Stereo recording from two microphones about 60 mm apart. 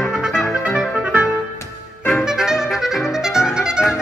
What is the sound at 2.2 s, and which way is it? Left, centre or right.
Music, centre.